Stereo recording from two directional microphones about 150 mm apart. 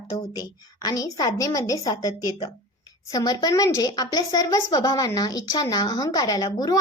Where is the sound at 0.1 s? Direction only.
25° left (ahead or behind).